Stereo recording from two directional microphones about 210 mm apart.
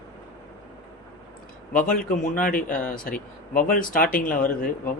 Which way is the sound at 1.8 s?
40° left (ahead or behind).